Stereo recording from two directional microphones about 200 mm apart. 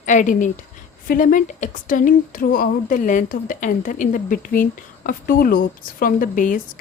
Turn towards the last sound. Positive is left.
turn(degrees=40)  # may be behind; listen again after turning